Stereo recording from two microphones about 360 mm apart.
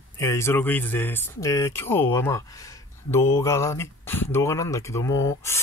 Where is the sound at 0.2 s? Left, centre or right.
Centre.